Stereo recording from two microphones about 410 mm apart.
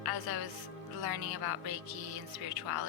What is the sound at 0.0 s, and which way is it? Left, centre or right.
A woman's voice, right.